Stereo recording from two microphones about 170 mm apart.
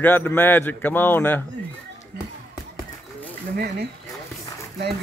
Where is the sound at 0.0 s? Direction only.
10° left (ahead or behind).